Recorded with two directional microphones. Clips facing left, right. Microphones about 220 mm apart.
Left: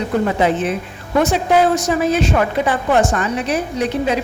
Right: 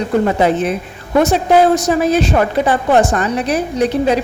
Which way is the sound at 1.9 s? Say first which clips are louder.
Right 3 dB; 35° right (ahead or behind).